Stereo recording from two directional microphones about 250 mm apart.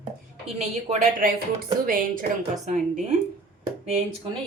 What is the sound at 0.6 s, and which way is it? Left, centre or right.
Speech, right.